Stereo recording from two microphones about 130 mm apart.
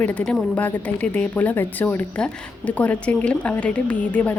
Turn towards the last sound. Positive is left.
turn(degrees=10)  # may be behind; listen again after turning